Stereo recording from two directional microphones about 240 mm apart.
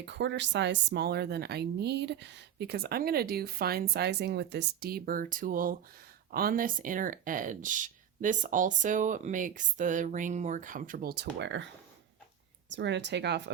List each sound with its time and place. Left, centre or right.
0.0 s speech: right
12.7 s speech: right